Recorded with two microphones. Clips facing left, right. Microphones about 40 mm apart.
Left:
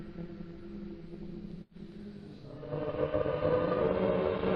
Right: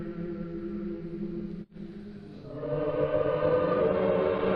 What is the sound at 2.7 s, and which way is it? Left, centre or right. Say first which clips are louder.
Music: right 5 dB; right.